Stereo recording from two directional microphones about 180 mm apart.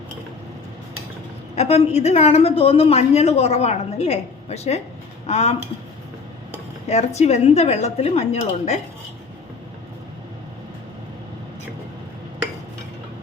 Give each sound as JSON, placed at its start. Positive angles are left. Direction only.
{"t": 1.5, "sound": "a woman's voice", "side_deg": 35}
{"t": 6.8, "sound": "a woman's voice", "side_deg": 40}